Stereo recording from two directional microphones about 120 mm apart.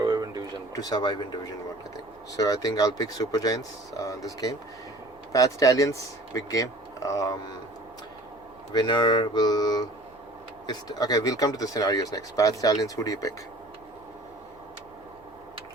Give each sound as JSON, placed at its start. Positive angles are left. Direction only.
{"t": 0.0, "sound": "a sound", "side_deg": -35}
{"t": 0.7, "sound": "speech", "side_deg": 30}
{"t": 8.7, "sound": "speech", "side_deg": 40}